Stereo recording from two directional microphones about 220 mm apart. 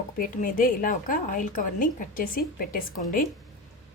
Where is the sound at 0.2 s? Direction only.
40° left (ahead or behind).